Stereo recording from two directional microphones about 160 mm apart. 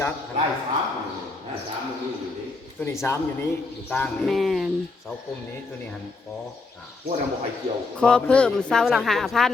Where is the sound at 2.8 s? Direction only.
15° left (ahead or behind); by 4.7 s centre (ahead or behind).